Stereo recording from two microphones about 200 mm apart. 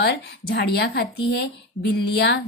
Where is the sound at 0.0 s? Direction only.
55° left (ahead or behind).